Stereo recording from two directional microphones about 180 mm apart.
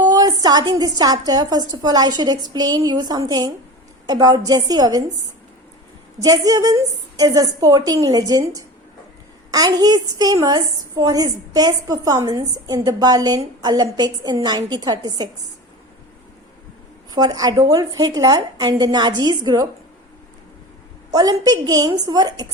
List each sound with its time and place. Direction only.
0.0 s a woman's voice: 20° right (ahead or behind)
6.2 s a woman's voice: 20° right (ahead or behind)
17.2 s a woman's voice: 20° right (ahead or behind)
21.1 s a woman's voice: 20° right (ahead or behind)